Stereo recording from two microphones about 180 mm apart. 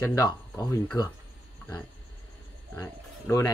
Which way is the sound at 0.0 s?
20° left (ahead or behind).